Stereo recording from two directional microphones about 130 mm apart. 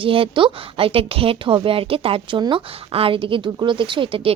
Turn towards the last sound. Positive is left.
turn(degrees=-45)  # may be behind; listen again after turning